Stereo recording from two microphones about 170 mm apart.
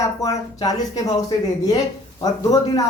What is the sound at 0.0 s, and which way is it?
A woman's voice, 20° left (ahead or behind).